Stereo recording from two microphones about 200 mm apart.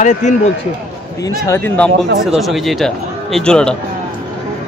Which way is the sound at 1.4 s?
10° left (ahead or behind).